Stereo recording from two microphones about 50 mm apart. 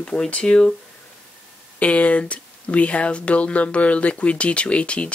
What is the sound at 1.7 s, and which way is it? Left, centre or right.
Speech, left.